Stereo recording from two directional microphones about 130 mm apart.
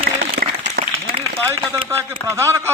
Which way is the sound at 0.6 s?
80° right.